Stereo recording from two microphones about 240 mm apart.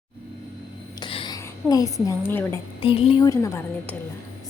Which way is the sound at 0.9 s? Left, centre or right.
Centre.